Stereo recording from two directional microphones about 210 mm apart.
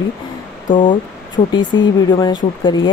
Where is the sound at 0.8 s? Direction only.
25° left (ahead or behind).